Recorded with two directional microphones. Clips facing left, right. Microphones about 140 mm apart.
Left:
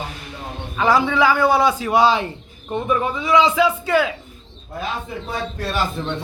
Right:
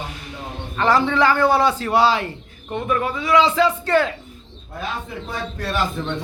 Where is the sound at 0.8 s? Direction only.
10° left (ahead or behind).